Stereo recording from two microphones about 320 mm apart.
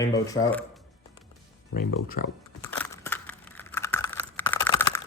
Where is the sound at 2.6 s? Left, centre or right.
Centre.